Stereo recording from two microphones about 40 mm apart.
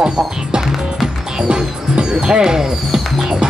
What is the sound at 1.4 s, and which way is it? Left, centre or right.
Music, right.